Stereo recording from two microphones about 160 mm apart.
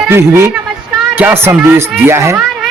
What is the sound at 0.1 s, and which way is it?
A man's voice, 15° right (ahead or behind).